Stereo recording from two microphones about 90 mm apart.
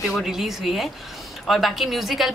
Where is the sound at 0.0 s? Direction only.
5° right (ahead or behind).